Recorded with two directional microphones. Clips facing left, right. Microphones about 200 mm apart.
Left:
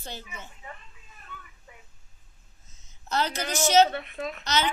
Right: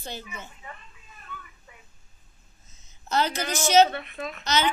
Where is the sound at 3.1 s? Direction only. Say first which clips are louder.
Right 2 dB; 10° right (ahead or behind).